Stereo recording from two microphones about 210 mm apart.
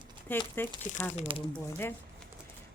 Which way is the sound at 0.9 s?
30° left (ahead or behind).